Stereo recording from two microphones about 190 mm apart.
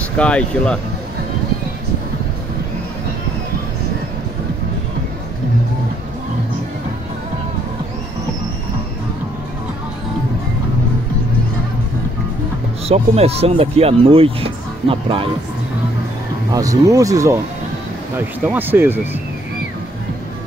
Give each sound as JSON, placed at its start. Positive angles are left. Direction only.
{"t": 0.2, "sound": "speech", "side_deg": 5}
{"t": 12.8, "sound": "speech", "side_deg": -35}
{"t": 16.5, "sound": "speech", "side_deg": -15}